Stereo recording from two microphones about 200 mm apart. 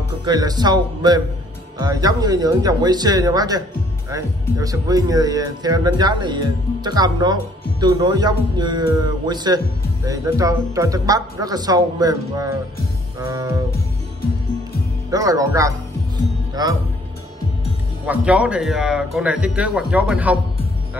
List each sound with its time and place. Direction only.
0.2 s speech: 20° right (ahead or behind)
15.0 s speech: 15° right (ahead or behind)
18.0 s speech: 5° right (ahead or behind)